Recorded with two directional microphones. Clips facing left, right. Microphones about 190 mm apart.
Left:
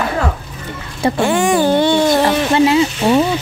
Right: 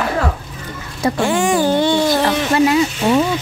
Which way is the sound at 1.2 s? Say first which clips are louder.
Left 2 dB; 60° left (ahead or behind).